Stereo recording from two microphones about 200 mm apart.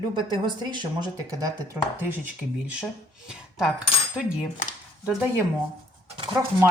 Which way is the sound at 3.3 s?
5° right (ahead or behind).